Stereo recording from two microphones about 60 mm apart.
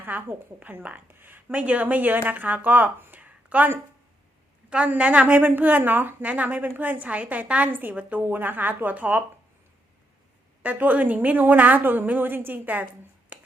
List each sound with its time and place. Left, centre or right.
0.0 s a woman's voice: right
4.9 s a woman's voice: right
10.6 s speech: right
13.3 s a sound: right